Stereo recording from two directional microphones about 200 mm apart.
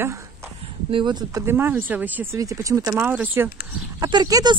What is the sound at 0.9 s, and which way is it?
Speech, 25° right (ahead or behind).